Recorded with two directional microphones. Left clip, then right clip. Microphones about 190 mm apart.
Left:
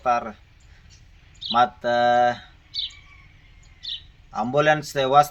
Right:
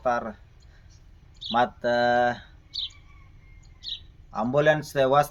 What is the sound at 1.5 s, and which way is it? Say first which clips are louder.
Speech: left 3 dB; 30° right (ahead or behind).